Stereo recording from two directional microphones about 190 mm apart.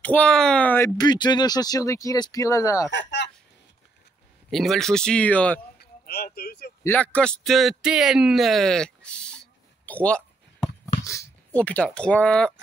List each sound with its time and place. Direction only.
0.0 s speech: 5° left (ahead or behind)
2.9 s speech: 70° left (ahead or behind)
4.5 s speech: centre (ahead or behind)
5.8 s a sound: 55° left (ahead or behind)
6.8 s speech: 10° left (ahead or behind)